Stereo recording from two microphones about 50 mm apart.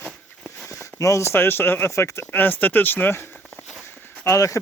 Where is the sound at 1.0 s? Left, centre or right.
Left.